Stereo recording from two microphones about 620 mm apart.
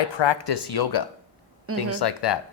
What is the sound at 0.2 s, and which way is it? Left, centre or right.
A woman's voice, left.